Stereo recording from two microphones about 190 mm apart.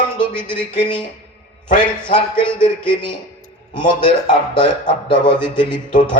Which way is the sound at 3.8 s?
25° left (ahead or behind).